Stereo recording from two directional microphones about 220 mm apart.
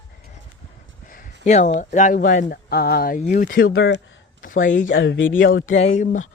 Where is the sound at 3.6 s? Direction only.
65° left (ahead or behind).